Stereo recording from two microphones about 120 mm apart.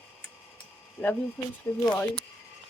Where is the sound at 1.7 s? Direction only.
25° left (ahead or behind).